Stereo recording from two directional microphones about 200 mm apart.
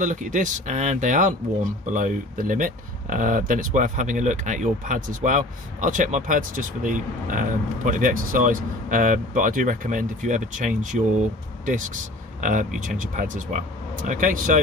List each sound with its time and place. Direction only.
0.0 s speech: 40° right (ahead or behind)